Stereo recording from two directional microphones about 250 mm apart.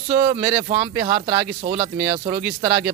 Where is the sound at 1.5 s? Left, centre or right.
Right.